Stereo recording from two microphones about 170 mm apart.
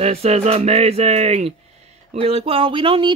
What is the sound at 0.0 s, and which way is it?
Speech, 35° right (ahead or behind).